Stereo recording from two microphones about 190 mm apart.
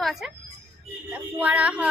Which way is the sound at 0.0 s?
Centre (ahead or behind).